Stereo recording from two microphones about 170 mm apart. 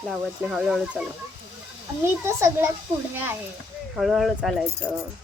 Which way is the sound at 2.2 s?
15° right (ahead or behind).